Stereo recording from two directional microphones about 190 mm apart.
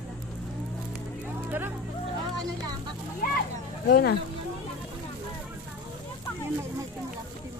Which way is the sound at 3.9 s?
55° left (ahead or behind).